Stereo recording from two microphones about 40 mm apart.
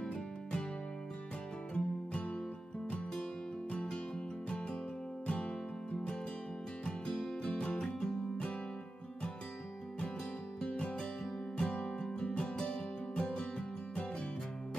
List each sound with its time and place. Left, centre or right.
0.0 s music: left
1.7 s music: left
3.7 s music: left
5.2 s music: left
10.6 s music: left